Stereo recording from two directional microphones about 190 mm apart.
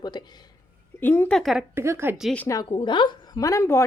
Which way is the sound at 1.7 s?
15° right (ahead or behind).